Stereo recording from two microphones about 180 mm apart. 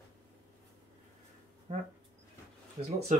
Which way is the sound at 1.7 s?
35° right (ahead or behind).